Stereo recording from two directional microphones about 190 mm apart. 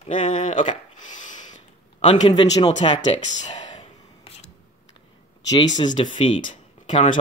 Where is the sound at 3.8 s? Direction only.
30° left (ahead or behind).